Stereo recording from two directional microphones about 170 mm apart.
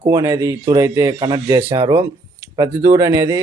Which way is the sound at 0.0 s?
20° right (ahead or behind).